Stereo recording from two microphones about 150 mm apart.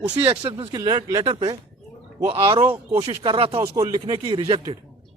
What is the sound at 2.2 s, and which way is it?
Speech, 40° right (ahead or behind).